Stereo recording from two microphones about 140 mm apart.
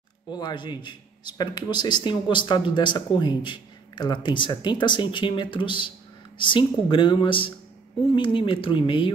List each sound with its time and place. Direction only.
0.3 s a man's voice: 30° left (ahead or behind)